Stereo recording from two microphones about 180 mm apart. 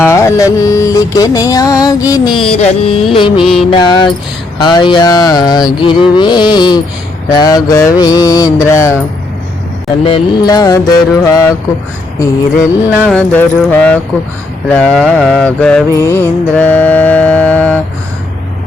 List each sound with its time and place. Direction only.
0.0 s music: 15° left (ahead or behind)
3.4 s music: centre (ahead or behind)
3.7 s music: 25° left (ahead or behind)
10.0 s music: 25° left (ahead or behind)
13.0 s mantra: 5° left (ahead or behind)